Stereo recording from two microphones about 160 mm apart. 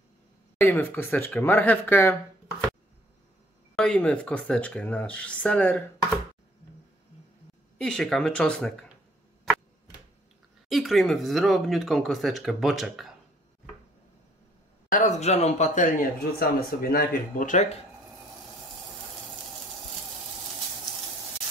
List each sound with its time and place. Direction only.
0.6 s speech: 15° left (ahead or behind)
3.7 s speech: 5° left (ahead or behind)
7.7 s speech: 5° left (ahead or behind)
10.7 s speech: centre (ahead or behind)
14.9 s speech: 50° left (ahead or behind)